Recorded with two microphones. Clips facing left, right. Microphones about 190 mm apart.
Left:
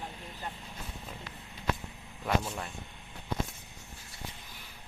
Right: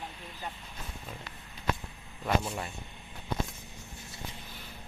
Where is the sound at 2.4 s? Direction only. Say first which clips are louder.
Right 2 dB; 5° right (ahead or behind).